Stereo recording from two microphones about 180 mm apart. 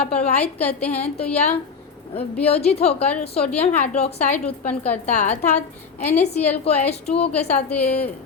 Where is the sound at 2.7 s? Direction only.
35° left (ahead or behind).